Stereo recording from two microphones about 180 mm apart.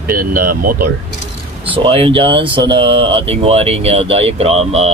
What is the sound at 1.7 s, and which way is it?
Speech, 30° right (ahead or behind).